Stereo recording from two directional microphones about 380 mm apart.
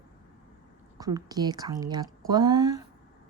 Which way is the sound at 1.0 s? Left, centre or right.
Centre.